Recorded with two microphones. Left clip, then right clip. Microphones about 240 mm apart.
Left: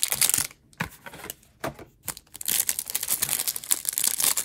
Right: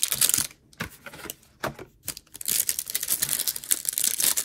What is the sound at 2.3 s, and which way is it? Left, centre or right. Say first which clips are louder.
Crumpling: left 1 dB; left.